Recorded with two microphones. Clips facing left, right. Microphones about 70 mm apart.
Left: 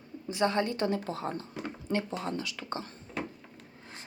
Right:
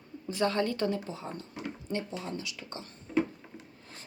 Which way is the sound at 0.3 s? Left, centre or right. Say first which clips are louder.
Even; left.